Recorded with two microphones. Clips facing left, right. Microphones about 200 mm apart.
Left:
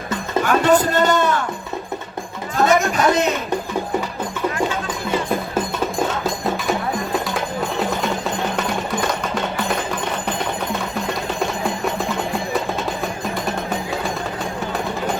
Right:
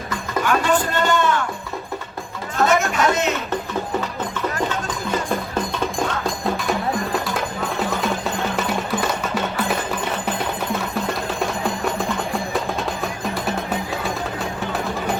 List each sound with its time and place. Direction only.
0.4 s a man's voice: 40° left (ahead or behind)
2.6 s speech: 35° left (ahead or behind)
7.8 s music: centre (ahead or behind)